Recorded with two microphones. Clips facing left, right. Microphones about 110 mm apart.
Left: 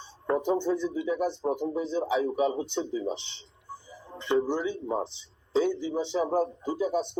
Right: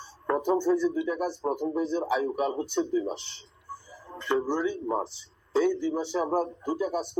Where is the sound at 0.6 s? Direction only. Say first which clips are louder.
Right 3 dB; 25° left (ahead or behind).